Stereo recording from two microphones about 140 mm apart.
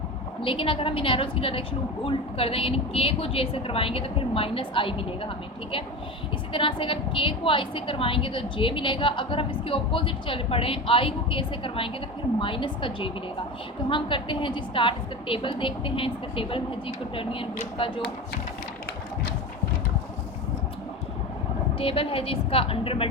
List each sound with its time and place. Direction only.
0.4 s a woman's voice: 40° left (ahead or behind)
6.5 s a woman's voice: 40° left (ahead or behind)
21.8 s a woman's voice: 40° left (ahead or behind)